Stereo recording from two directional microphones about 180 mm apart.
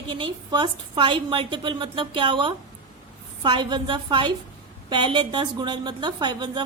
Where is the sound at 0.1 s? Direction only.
25° right (ahead or behind).